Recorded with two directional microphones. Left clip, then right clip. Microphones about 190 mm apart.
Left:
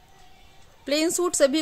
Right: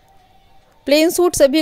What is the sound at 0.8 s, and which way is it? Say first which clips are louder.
Speech: right 10 dB; 35° right (ahead or behind).